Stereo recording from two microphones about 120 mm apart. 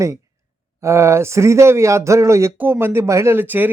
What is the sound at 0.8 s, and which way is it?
Speech, 25° right (ahead or behind).